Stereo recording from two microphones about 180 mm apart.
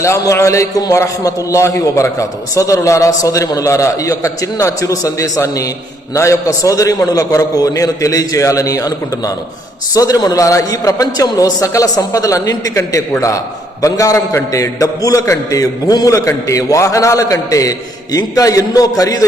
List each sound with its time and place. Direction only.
0.0 s a man's voice: 15° left (ahead or behind)